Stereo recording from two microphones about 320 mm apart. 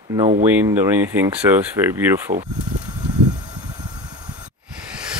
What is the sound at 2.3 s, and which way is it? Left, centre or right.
Speech, right.